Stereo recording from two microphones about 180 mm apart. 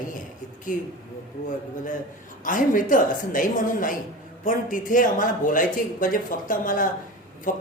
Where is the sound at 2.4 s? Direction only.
45° left (ahead or behind).